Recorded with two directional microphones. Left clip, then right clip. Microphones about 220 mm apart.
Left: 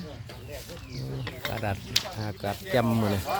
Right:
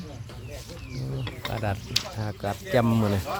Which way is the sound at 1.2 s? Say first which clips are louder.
Left 1 dB; 40° left (ahead or behind).